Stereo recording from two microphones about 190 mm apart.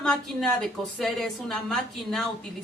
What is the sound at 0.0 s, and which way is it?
Speech, 5° left (ahead or behind).